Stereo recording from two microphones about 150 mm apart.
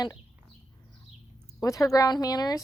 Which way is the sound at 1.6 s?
20° left (ahead or behind).